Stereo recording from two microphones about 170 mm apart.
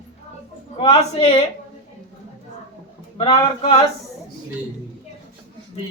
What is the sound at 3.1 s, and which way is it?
Speech, 30° left (ahead or behind).